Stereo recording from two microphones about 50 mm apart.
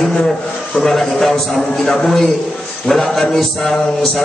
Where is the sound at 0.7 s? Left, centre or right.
Centre.